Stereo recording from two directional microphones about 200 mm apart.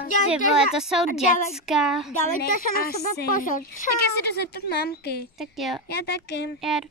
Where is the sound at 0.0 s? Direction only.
40° left (ahead or behind).